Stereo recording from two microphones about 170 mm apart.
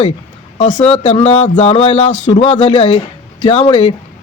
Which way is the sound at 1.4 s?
45° left (ahead or behind).